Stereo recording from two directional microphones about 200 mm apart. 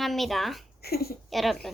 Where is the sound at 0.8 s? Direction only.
50° left (ahead or behind).